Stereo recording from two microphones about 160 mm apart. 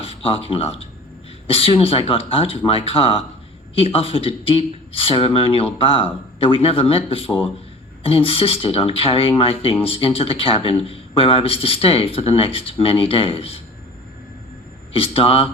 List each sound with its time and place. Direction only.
0.0 s speech: 35° left (ahead or behind)
14.9 s speech: 35° left (ahead or behind)